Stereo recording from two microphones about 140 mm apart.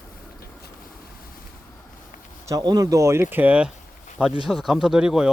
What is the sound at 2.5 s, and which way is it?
Speech, 25° right (ahead or behind).